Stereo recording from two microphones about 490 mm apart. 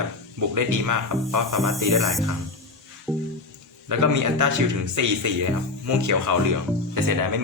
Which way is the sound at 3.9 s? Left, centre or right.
Right.